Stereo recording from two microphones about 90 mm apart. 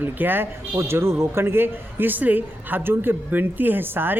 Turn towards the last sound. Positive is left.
turn(degrees=-25)  # may be behind; listen again after turning